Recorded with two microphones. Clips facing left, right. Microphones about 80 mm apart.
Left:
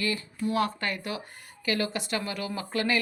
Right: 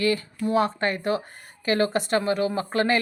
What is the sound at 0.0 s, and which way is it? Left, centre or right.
Speech, right.